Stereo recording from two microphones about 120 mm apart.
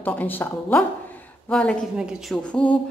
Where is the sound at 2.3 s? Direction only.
10° left (ahead or behind).